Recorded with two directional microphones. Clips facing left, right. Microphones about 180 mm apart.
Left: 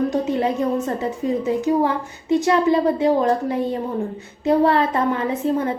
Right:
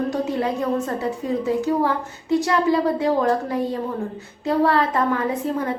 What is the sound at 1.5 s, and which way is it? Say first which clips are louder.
A woman's voice: left 2 dB; 20° left (ahead or behind).